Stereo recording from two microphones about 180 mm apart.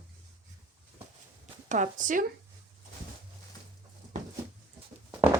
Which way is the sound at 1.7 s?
45° right (ahead or behind).